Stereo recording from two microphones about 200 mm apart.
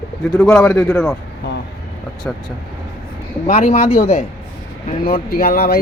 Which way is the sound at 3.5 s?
35° left (ahead or behind).